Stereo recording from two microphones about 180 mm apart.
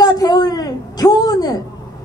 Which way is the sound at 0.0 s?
20° left (ahead or behind).